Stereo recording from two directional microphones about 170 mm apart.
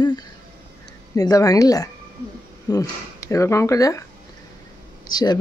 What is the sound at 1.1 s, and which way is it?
A woman's voice, 20° left (ahead or behind).